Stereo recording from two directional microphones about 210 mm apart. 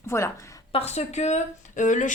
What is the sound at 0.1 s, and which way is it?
Speech, 10° left (ahead or behind).